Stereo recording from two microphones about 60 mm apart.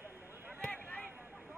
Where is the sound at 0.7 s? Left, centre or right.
Left.